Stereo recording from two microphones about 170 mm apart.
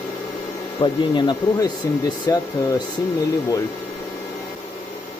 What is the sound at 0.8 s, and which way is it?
Speech, 25° left (ahead or behind).